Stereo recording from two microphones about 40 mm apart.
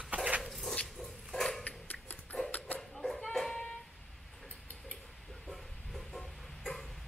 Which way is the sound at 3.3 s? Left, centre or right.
Centre.